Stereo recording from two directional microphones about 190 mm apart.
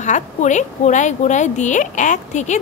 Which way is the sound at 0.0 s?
40° left (ahead or behind).